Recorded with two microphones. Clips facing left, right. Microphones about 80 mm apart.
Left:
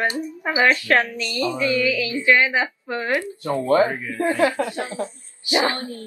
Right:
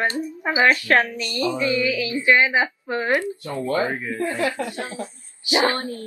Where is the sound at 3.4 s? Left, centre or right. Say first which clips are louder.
Left 5 dB; left.